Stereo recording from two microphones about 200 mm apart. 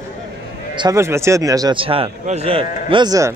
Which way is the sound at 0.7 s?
15° right (ahead or behind).